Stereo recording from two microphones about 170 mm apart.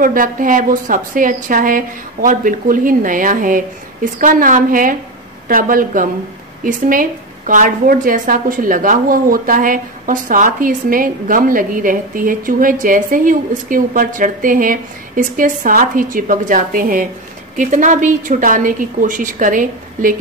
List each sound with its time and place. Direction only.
0.0 s a woman's voice: 55° right (ahead or behind)